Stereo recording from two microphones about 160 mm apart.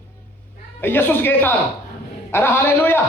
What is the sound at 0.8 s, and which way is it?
Speech, 10° left (ahead or behind).